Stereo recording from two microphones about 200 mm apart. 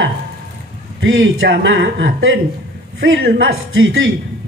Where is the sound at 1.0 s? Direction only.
70° right (ahead or behind).